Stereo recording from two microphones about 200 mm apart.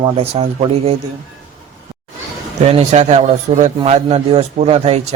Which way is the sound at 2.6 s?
30° right (ahead or behind).